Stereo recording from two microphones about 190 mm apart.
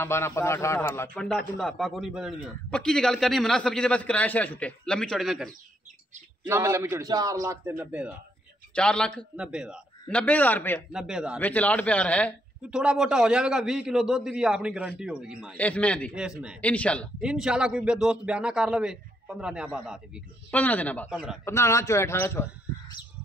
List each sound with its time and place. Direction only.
0.0 s a man's voice: 15° left (ahead or behind)
6.4 s a man's voice: 15° right (ahead or behind)
7.7 s a man's voice: 5° right (ahead or behind)
8.7 s a man's voice: 5° left (ahead or behind)
10.9 s a man's voice: 5° right (ahead or behind)
11.3 s speech: 10° left (ahead or behind)
12.6 s a man's voice: 5° right (ahead or behind)
15.5 s speech: 5° left (ahead or behind)
16.2 s a man's voice: 5° right (ahead or behind)
16.6 s speech: 5° left (ahead or behind)
17.2 s a man's voice: 5° right (ahead or behind)
20.5 s speech: 10° left (ahead or behind)
21.1 s a man's voice: centre (ahead or behind)
21.5 s speech: 15° left (ahead or behind)